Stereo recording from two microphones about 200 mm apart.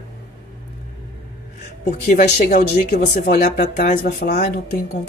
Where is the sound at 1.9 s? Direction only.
40° left (ahead or behind).